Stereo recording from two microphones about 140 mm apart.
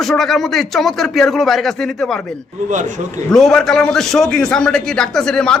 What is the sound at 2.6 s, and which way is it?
Speech, 60° right (ahead or behind).